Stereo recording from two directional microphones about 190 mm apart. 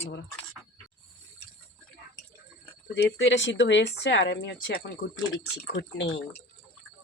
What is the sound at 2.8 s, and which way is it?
Speech, 65° left (ahead or behind).